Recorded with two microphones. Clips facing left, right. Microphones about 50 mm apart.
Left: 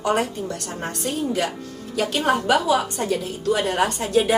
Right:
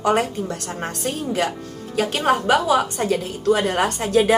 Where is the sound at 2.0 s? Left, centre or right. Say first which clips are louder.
Right 2 dB; right.